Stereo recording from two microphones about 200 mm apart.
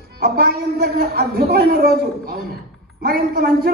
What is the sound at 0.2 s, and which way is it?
A woman's voice, 50° right (ahead or behind).